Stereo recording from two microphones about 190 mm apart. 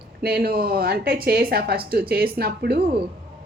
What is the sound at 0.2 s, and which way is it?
Speech, 55° right (ahead or behind).